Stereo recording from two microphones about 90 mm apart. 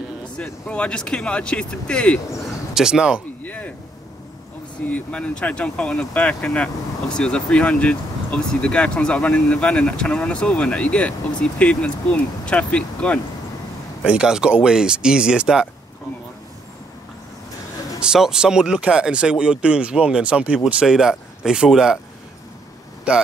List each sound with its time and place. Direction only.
0.4 s speech: 15° left (ahead or behind)
2.7 s speech: 5° right (ahead or behind)
3.4 s a sound: 15° left (ahead or behind)
4.8 s speech: 15° left (ahead or behind)
14.0 s speech: 10° right (ahead or behind)
18.0 s speech: 5° right (ahead or behind)
23.1 s speech: 10° right (ahead or behind)